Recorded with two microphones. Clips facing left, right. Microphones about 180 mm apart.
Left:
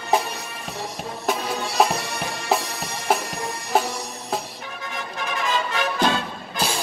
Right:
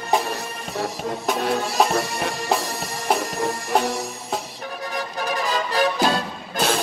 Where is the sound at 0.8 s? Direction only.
Centre (ahead or behind).